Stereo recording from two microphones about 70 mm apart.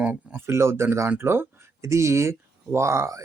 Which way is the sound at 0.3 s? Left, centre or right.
Right.